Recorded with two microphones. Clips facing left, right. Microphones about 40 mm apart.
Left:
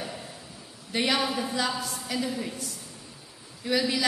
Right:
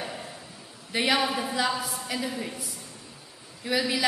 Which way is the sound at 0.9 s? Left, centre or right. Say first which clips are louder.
Right 1 dB; centre.